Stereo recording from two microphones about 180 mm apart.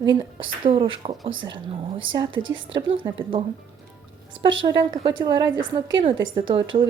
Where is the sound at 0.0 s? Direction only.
25° right (ahead or behind).